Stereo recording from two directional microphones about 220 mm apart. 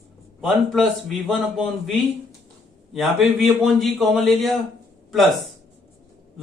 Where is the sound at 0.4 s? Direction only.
Centre (ahead or behind).